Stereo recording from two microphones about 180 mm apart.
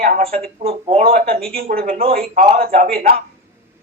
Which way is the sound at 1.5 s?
55° right (ahead or behind).